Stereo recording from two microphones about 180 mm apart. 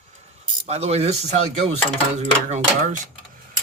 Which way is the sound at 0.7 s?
35° right (ahead or behind).